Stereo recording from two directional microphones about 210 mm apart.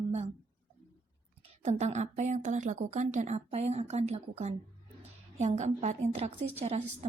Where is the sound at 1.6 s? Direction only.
35° right (ahead or behind).